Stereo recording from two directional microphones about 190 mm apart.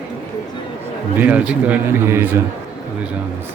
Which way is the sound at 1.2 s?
5° right (ahead or behind).